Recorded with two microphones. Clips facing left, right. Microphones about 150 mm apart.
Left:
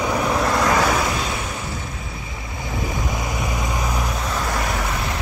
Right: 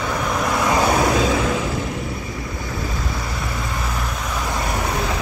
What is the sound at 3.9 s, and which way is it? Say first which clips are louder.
Vehicle: left 2 dB; centre (ahead or behind).